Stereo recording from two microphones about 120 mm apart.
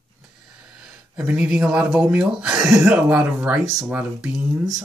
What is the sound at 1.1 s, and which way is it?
Speech, 10° right (ahead or behind).